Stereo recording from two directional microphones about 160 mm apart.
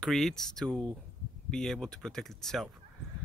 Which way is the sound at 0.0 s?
5° left (ahead or behind).